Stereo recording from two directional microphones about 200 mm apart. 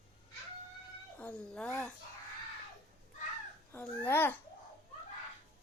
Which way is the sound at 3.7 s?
5° left (ahead or behind).